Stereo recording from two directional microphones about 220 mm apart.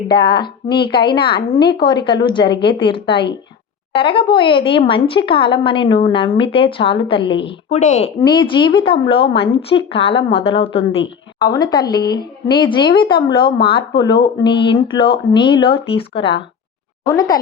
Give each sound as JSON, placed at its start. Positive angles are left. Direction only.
{"t": 0.1, "sound": "a woman's voice", "side_deg": 20}
{"t": 8.2, "sound": "a woman's voice", "side_deg": 20}